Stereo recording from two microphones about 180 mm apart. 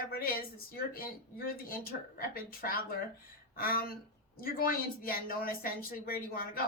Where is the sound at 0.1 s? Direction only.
55° left (ahead or behind).